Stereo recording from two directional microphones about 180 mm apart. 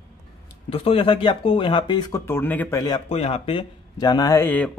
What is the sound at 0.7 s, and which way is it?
Speech, 30° left (ahead or behind).